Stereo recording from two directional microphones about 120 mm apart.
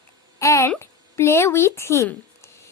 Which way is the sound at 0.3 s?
25° left (ahead or behind).